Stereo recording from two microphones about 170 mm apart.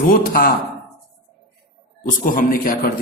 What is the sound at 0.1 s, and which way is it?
Speech, 60° left (ahead or behind).